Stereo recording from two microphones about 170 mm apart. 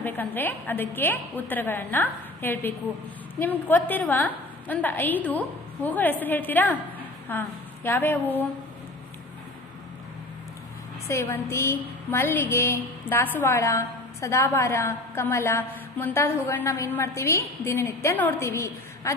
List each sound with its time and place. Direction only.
0.0 s a woman's voice: 10° left (ahead or behind)
11.1 s a woman's voice: 15° left (ahead or behind)